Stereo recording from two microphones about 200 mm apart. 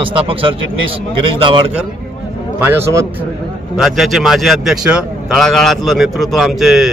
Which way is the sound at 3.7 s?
Centre (ahead or behind).